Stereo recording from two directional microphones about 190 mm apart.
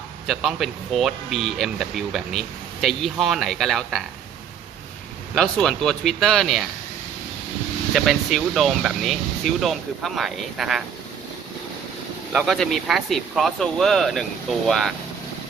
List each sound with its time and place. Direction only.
0.3 s speech: centre (ahead or behind)
5.3 s speech: centre (ahead or behind)
7.9 s speech: centre (ahead or behind)
12.3 s speech: centre (ahead or behind)